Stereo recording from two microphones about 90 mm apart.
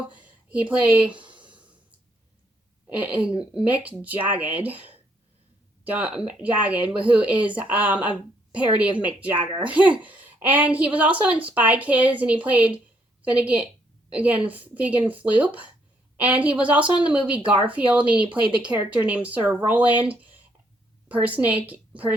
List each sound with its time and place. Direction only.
0.1 s speech: 15° right (ahead or behind)
2.9 s speech: 15° right (ahead or behind)